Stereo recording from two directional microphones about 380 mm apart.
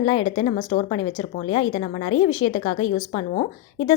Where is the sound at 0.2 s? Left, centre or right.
Left.